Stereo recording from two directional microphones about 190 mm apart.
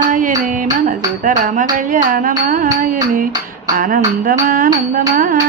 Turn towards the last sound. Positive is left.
turn(degrees=-45)  # may be behind; listen again after turning